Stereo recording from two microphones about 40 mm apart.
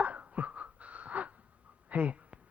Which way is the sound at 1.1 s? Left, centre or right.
Right.